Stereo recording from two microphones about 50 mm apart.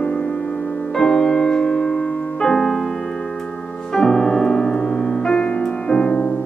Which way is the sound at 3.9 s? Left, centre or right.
Centre.